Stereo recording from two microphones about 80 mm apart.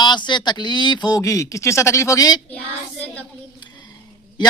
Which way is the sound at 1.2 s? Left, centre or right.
Left.